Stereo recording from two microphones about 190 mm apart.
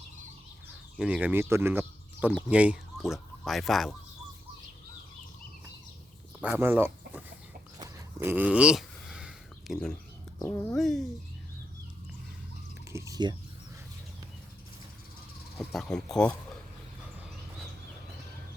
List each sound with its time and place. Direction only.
0.9 s speech: 5° right (ahead or behind)
6.4 s speech: 10° right (ahead or behind)
7.8 s a sound: 15° right (ahead or behind); by 9.9 s centre (ahead or behind)
10.4 s speech: 5° left (ahead or behind)
12.9 s chewing: 15° right (ahead or behind)
15.5 s speech: centre (ahead or behind)